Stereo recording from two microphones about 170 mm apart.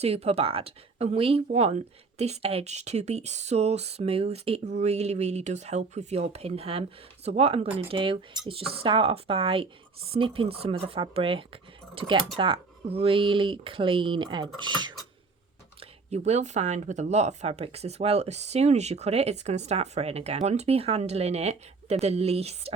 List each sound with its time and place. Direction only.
0.0 s speech: 40° right (ahead or behind)
15.8 s speech: 40° right (ahead or behind)